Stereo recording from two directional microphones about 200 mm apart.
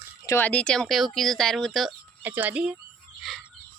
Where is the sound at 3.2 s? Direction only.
Centre (ahead or behind).